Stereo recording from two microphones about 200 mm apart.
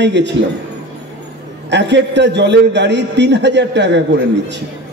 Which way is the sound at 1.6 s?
60° right (ahead or behind).